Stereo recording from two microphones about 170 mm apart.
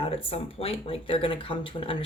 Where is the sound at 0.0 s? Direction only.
35° left (ahead or behind).